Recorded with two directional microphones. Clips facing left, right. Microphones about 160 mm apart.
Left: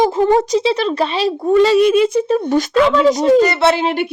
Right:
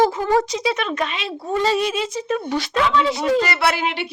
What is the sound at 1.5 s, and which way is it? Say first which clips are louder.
Speech: left 9 dB; 75° left (ahead or behind).